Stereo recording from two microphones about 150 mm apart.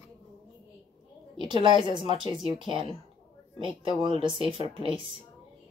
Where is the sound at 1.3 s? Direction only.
30° right (ahead or behind).